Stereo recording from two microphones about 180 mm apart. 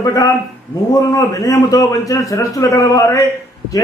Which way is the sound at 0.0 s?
20° left (ahead or behind).